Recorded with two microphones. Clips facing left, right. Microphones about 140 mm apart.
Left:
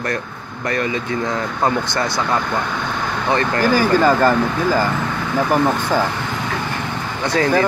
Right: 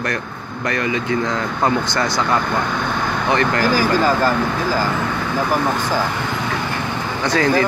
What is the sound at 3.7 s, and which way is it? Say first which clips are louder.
Speech: left 5 dB; 55° left (ahead or behind).